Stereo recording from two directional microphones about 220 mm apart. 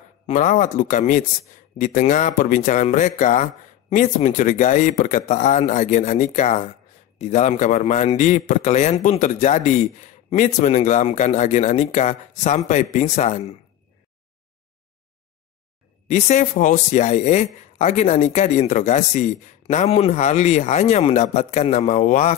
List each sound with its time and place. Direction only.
0.3 s speech: 35° left (ahead or behind)
16.1 s speech: 30° left (ahead or behind)